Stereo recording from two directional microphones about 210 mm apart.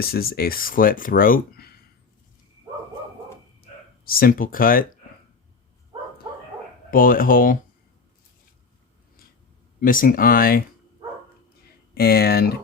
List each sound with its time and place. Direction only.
0.0 s speech: 45° left (ahead or behind)
3.6 s speech: 45° left (ahead or behind)
6.9 s speech: 40° left (ahead or behind)
9.8 s speech: 40° left (ahead or behind)
11.9 s speech: 45° left (ahead or behind)